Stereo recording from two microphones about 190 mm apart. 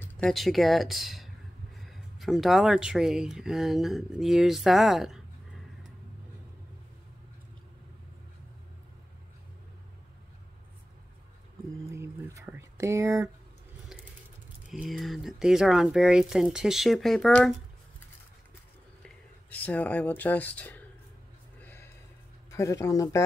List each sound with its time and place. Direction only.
0.0 s speech: 5° left (ahead or behind)
11.8 s a sound: 15° right (ahead or behind)
14.7 s speech: centre (ahead or behind)
19.0 s speech: 10° left (ahead or behind)
21.5 s a sound: 10° left (ahead or behind)
22.5 s speech: 15° left (ahead or behind)